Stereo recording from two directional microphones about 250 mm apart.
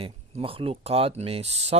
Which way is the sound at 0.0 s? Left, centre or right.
Right.